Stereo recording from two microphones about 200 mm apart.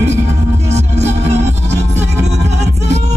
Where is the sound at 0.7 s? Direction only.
35° right (ahead or behind).